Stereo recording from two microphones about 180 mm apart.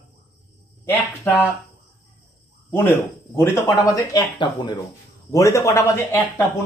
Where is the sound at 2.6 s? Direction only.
10° left (ahead or behind).